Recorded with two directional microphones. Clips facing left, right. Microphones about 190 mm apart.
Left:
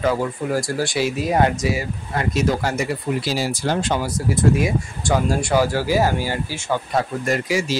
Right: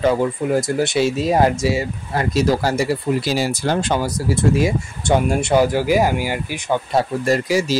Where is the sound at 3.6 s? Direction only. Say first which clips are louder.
Right 2 dB; 55° right (ahead or behind).